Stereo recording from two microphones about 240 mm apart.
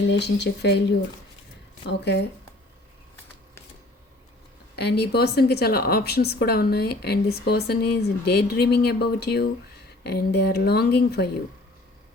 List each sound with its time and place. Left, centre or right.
0.1 s speech: left
4.8 s speech: left